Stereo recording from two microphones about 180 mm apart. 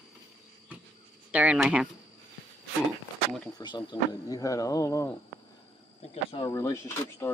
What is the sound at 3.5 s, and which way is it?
Speech, 25° left (ahead or behind).